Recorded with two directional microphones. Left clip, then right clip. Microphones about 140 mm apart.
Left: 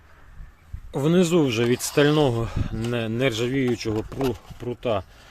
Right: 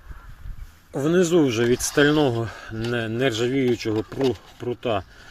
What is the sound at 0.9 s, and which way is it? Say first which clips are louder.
Speech: right 1 dB; 35° left (ahead or behind).